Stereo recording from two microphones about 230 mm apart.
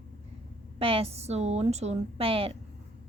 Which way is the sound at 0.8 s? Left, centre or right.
Right.